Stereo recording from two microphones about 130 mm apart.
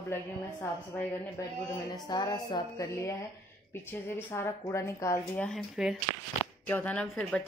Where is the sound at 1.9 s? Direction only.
30° left (ahead or behind).